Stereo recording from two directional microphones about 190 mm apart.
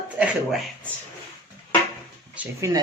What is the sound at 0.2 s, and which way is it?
Speech, 5° right (ahead or behind).